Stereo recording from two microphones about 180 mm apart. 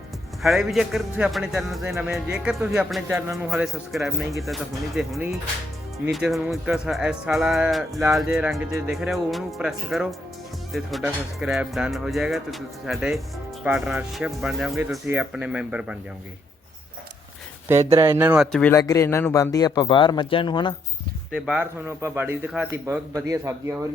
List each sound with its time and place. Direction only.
0.4 s speech: centre (ahead or behind)
3.1 s speech: 15° right (ahead or behind)
3.3 s speech: centre (ahead or behind)
18.0 s speech: 10° right (ahead or behind)
18.7 s speech: 20° left (ahead or behind)
21.3 s speech: centre (ahead or behind)
21.6 s speech: 15° right (ahead or behind)